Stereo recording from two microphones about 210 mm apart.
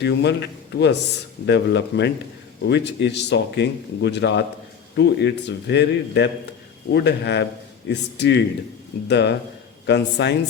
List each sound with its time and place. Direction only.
0.0 s a man's voice: 55° left (ahead or behind)